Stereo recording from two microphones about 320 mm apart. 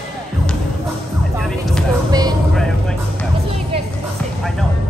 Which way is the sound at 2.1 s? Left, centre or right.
Centre.